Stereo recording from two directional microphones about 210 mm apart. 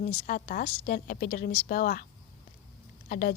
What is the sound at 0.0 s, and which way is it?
A woman's voice, 35° left (ahead or behind).